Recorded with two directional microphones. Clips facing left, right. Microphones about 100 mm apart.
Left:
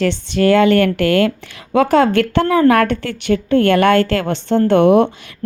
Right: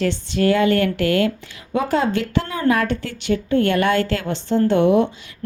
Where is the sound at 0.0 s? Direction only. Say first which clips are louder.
Left 4 dB; 75° left (ahead or behind).